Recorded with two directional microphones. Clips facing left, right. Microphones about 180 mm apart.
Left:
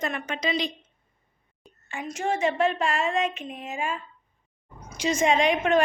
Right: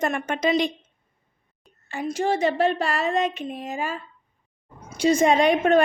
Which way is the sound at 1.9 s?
35° right (ahead or behind).